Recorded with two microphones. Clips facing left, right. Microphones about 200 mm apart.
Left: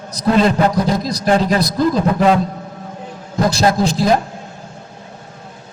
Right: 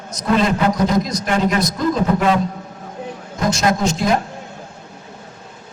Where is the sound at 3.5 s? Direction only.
35° left (ahead or behind).